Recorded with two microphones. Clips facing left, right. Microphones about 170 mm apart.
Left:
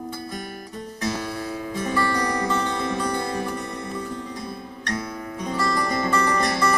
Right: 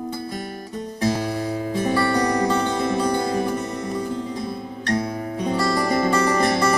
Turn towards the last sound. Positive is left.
turn(degrees=-25)  # may be behind; listen again after turning